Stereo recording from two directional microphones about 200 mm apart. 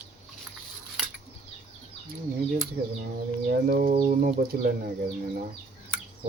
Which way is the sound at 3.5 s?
45° right (ahead or behind).